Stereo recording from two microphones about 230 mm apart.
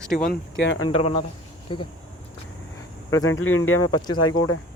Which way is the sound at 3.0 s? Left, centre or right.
Centre.